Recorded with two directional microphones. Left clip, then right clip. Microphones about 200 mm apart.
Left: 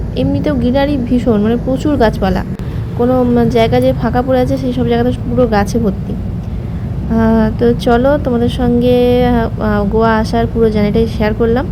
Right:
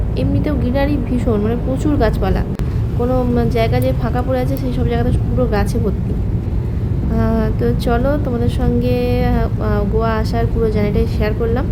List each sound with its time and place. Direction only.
0.2 s a woman's voice: 20° left (ahead or behind)
7.1 s a woman's voice: 25° left (ahead or behind)